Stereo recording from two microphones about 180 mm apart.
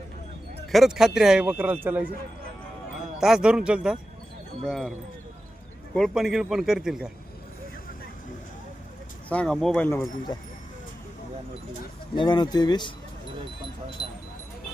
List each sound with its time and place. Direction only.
0.7 s speech: centre (ahead or behind)
3.2 s speech: centre (ahead or behind)
9.3 s speech: 5° left (ahead or behind)
12.1 s speech: 25° left (ahead or behind)
14.0 s speech: 35° right (ahead or behind)